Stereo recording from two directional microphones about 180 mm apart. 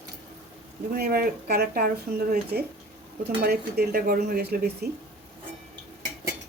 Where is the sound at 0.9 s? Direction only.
60° right (ahead or behind).